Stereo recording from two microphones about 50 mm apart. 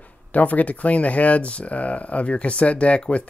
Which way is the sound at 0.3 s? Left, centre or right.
Left.